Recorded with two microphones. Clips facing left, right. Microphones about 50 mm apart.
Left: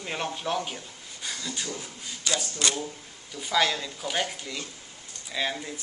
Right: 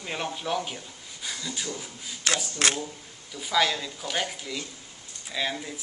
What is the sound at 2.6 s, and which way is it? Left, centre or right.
Speech, right.